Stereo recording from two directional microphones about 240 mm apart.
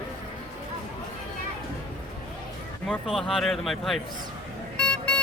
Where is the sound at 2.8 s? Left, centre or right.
Centre.